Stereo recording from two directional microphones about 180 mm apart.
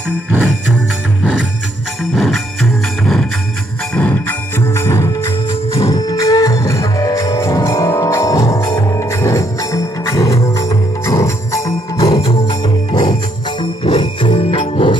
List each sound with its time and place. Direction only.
1.2 s music: 5° right (ahead or behind)
3.9 s music: 10° left (ahead or behind); by 14.9 s 30° left (ahead or behind)